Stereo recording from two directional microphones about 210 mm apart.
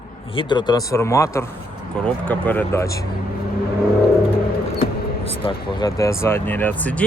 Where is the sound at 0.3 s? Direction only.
25° left (ahead or behind).